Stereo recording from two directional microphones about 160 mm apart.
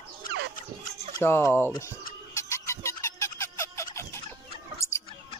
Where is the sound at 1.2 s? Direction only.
15° left (ahead or behind).